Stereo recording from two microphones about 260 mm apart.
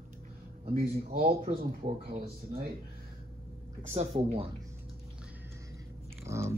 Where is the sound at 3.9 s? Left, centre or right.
Right.